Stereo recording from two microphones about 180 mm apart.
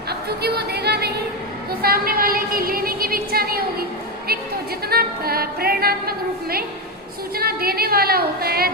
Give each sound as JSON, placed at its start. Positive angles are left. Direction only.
{"t": 0.1, "sound": "a sound", "side_deg": -65}
{"t": 1.8, "sound": "a woman's voice", "side_deg": -55}
{"t": 4.9, "sound": "a woman's voice", "side_deg": -55}